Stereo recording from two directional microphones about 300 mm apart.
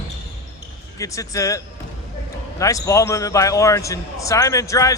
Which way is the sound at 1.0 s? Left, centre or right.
Centre.